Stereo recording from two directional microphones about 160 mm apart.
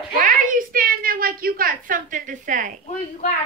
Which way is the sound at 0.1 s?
55° right (ahead or behind).